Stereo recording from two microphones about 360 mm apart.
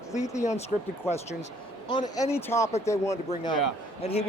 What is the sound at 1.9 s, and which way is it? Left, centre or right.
Speech, centre.